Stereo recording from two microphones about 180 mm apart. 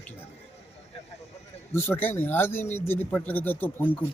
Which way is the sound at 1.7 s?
10° left (ahead or behind).